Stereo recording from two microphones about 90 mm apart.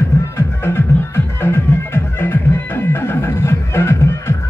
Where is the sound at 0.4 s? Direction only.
30° left (ahead or behind).